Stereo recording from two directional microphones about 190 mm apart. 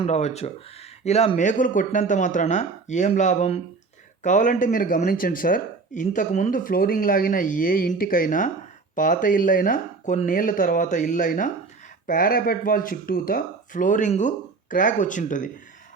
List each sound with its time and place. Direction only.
0.0 s speech: 35° left (ahead or behind)